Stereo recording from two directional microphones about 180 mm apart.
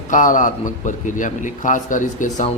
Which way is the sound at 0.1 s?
45° left (ahead or behind).